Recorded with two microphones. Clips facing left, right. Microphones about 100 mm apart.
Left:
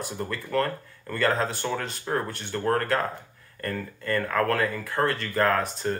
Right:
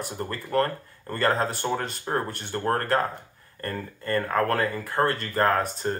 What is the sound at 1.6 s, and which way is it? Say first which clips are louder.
Speech: right 2 dB; 25° right (ahead or behind).